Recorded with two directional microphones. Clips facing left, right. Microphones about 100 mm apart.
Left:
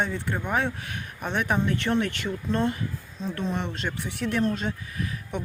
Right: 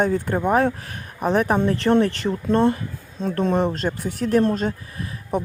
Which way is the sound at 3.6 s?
40° right (ahead or behind).